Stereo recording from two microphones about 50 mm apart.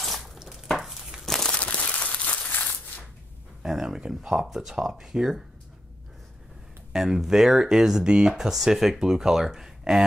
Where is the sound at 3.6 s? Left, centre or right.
Centre.